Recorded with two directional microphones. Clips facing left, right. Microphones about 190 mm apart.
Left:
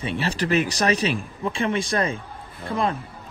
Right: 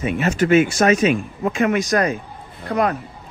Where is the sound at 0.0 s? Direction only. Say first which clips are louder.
Right 6 dB; 30° left (ahead or behind).